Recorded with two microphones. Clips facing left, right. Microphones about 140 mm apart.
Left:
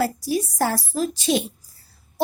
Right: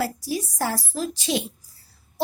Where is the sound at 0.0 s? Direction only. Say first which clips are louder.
Left 4 dB; 45° left (ahead or behind).